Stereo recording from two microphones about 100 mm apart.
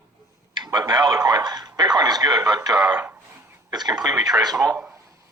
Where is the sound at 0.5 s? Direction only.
45° right (ahead or behind).